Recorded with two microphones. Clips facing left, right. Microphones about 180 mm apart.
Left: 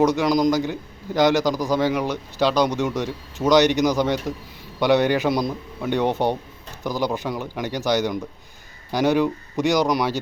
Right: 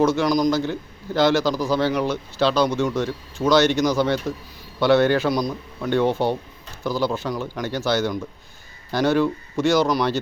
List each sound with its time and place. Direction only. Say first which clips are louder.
0.0 s a man's voice: even; 15° left (ahead or behind)